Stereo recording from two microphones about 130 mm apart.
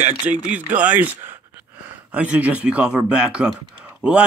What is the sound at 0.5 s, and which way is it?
Speech, 10° right (ahead or behind).